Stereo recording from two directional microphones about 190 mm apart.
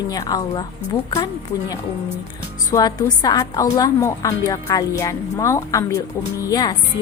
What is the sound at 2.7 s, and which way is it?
A woman's voice, 20° left (ahead or behind).